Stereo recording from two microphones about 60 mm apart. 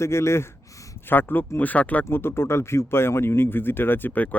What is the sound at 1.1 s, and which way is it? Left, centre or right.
Speech, left.